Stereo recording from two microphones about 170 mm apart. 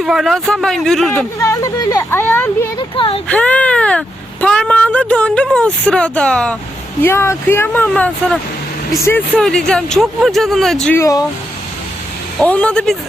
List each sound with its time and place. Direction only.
0.0 s speech: centre (ahead or behind)
1.4 s speech: 20° left (ahead or behind)
2.7 s speech: 30° left (ahead or behind)
3.2 s speech: 5° left (ahead or behind)
10.9 s speech: 20° left (ahead or behind)
12.4 s speech: 5° left (ahead or behind)